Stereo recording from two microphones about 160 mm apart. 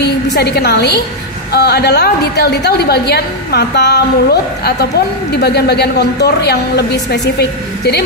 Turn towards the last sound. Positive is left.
turn(degrees=90)